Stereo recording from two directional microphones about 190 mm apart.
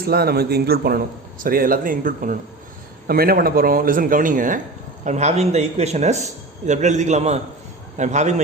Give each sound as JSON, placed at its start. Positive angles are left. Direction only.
{"t": 0.0, "sound": "a man's voice", "side_deg": -55}